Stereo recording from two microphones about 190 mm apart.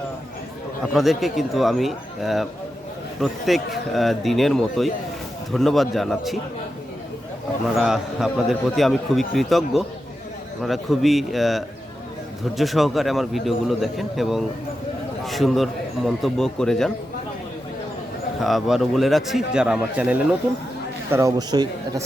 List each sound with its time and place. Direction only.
0.9 s a man's voice: centre (ahead or behind)
7.8 s a man's voice: centre (ahead or behind)
18.3 s a man's voice: centre (ahead or behind); by 22.0 s 20° right (ahead or behind)